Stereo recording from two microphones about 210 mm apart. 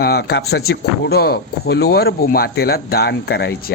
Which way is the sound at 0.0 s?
50° left (ahead or behind).